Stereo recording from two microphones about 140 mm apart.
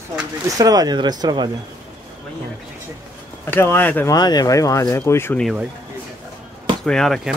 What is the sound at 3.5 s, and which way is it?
Speech, 15° left (ahead or behind).